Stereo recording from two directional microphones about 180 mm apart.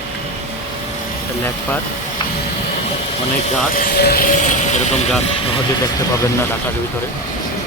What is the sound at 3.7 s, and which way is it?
Speech, 55° left (ahead or behind).